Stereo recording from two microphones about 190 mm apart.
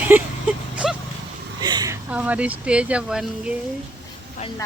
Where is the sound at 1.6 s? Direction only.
20° right (ahead or behind).